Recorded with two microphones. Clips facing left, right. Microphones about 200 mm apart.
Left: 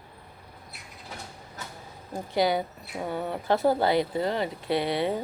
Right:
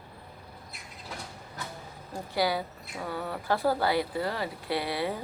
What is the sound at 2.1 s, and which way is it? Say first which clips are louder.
Speech: left 4 dB; 20° left (ahead or behind).